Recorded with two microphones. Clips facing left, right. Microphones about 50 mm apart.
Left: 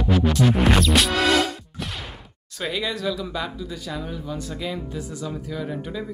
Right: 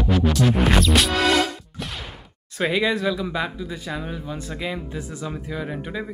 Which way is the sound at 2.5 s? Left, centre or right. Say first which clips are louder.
Right 6 dB; right.